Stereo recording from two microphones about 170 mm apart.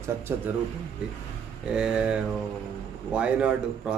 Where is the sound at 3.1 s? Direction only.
5° right (ahead or behind).